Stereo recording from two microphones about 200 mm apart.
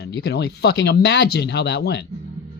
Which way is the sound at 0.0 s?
55° left (ahead or behind).